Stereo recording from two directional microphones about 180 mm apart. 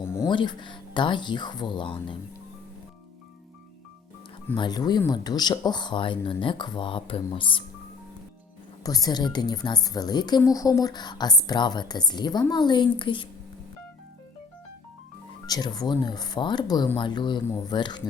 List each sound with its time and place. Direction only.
0.0 s music: 15° left (ahead or behind)
0.3 s speech: 25° left (ahead or behind)
4.5 s speech: 25° left (ahead or behind)
8.8 s speech: 20° left (ahead or behind)
15.4 s speech: 20° left (ahead or behind)